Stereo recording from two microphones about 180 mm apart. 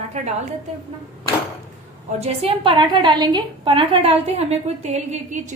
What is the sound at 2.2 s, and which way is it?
A woman's voice, 30° right (ahead or behind).